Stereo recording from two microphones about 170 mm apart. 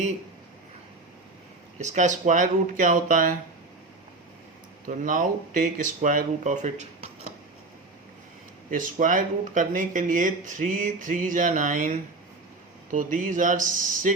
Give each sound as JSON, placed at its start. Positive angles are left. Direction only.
{"t": 1.8, "sound": "speech", "side_deg": -45}
{"t": 4.9, "sound": "speech", "side_deg": -50}
{"t": 8.7, "sound": "speech", "side_deg": -50}